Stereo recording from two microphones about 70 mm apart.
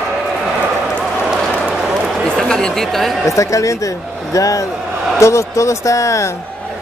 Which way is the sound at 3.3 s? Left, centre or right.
Left.